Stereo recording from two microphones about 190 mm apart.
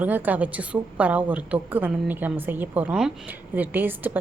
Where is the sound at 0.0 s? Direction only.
10° right (ahead or behind).